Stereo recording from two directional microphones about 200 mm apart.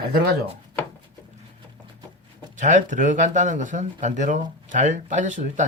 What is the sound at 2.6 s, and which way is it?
Speech, 40° right (ahead or behind).